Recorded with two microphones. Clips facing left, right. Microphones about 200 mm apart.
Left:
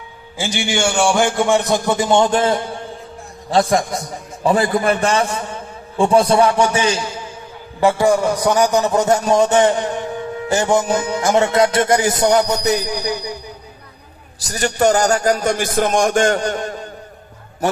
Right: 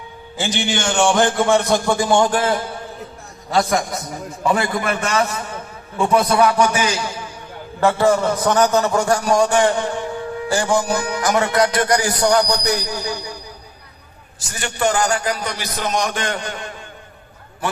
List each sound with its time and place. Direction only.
0.3 s a man's voice: 10° left (ahead or behind)
7.8 s a man's voice: 15° left (ahead or behind)
14.3 s a man's voice: 40° left (ahead or behind)